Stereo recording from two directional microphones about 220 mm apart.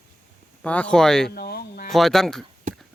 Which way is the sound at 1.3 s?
45° left (ahead or behind).